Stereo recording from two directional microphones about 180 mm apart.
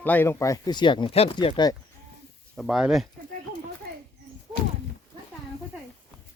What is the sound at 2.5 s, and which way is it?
Speech, centre (ahead or behind).